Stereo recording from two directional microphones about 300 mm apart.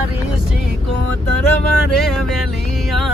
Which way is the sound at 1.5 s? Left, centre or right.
Centre.